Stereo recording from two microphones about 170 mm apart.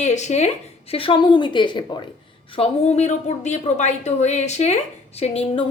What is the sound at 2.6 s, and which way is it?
A woman's voice, 35° left (ahead or behind).